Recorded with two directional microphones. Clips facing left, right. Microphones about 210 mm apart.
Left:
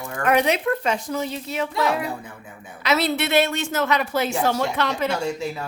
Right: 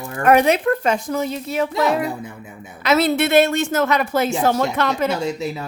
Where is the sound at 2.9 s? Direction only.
50° right (ahead or behind).